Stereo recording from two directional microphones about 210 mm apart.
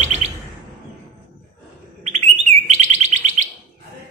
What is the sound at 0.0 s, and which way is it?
Chirp, 35° right (ahead or behind).